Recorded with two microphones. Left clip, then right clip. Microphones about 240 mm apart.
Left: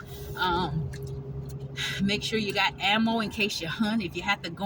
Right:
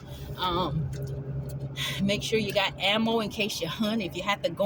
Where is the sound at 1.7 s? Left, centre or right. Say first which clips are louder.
Even; right.